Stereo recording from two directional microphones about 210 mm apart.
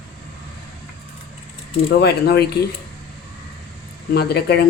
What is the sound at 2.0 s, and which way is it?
Speech, 50° left (ahead or behind).